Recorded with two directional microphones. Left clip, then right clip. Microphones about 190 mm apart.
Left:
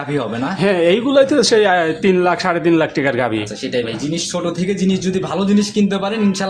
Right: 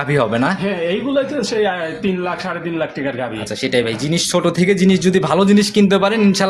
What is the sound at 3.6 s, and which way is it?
Speech, 35° right (ahead or behind).